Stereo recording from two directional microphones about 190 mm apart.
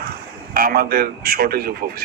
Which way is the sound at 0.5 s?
50° right (ahead or behind).